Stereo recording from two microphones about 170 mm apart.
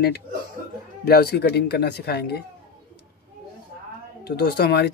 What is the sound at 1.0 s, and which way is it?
Speech, 65° left (ahead or behind).